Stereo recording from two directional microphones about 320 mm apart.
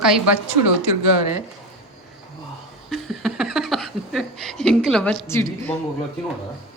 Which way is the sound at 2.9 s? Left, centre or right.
Centre.